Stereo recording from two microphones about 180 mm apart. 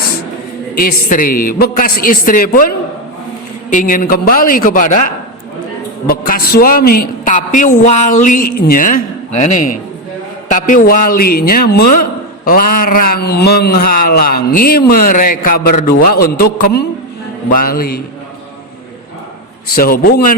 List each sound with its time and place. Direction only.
0.8 s a woman's voice: 55° left (ahead or behind)
9.4 s a man's voice: 40° left (ahead or behind); by 18.0 s 55° left (ahead or behind)
19.6 s speech: 55° left (ahead or behind)